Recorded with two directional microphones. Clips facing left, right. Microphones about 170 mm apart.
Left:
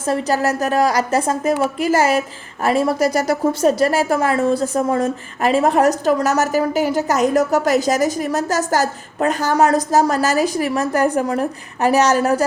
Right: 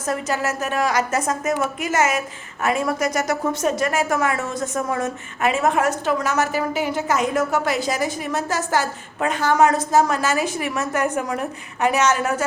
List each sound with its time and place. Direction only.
0.0 s a woman's voice: 30° left (ahead or behind)